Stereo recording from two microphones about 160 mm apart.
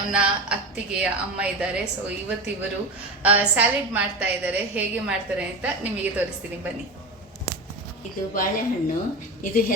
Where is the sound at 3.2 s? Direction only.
10° right (ahead or behind).